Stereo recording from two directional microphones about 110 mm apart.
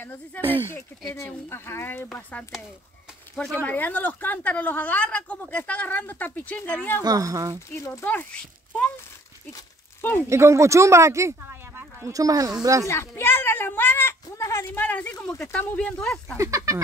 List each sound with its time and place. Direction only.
0.3 s a woman's voice: 15° left (ahead or behind)
1.1 s speech: 25° left (ahead or behind)
3.5 s a woman's voice: 15° left (ahead or behind)
7.0 s speech: 35° right (ahead or behind)
7.7 s speech: 25° left (ahead or behind)
8.0 s a woman's voice: 15° left (ahead or behind)
10.3 s speech: 25° right (ahead or behind)
12.8 s a woman's voice: 25° left (ahead or behind)
16.0 s speech: 5° left (ahead or behind)
16.3 s a sound: 30° right (ahead or behind)